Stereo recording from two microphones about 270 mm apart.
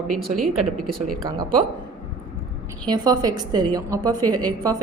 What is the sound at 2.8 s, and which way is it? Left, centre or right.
A woman's voice, centre.